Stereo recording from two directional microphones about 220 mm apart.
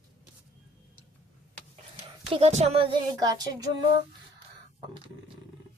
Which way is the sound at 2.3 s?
30° right (ahead or behind).